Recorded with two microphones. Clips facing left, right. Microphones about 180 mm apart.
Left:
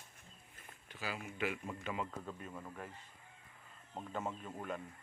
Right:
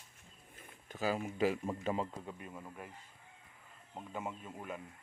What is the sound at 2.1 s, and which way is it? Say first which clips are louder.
Speech: even; 15° right (ahead or behind).